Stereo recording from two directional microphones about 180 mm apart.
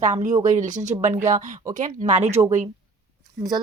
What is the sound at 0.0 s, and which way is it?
Speech, 40° right (ahead or behind).